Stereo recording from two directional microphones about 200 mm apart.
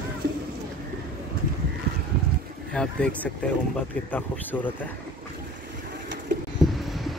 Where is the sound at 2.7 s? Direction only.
5° left (ahead or behind).